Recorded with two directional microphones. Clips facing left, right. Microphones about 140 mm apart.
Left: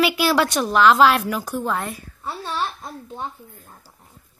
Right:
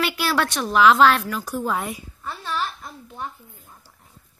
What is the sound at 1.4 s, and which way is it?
Speech, centre (ahead or behind).